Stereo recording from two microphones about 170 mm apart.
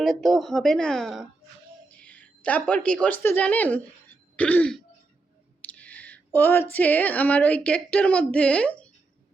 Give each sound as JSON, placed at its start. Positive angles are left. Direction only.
{"t": 0.0, "sound": "speech", "side_deg": 0}
{"t": 4.4, "sound": "throat clearing", "side_deg": 10}
{"t": 5.6, "sound": "speech", "side_deg": 10}